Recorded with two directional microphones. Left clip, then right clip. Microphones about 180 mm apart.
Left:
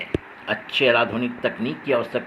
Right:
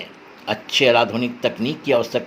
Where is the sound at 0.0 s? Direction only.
45° right (ahead or behind).